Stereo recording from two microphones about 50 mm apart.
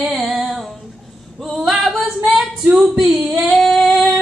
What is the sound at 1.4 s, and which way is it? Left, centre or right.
Female singing, centre.